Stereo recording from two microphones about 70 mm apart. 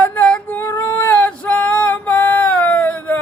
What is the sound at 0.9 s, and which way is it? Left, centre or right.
Female singing, left.